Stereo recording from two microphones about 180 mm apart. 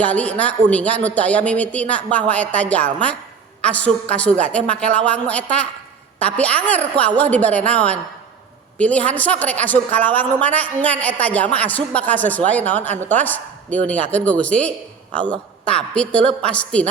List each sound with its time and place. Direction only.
0.0 s a woman's voice: 5° left (ahead or behind)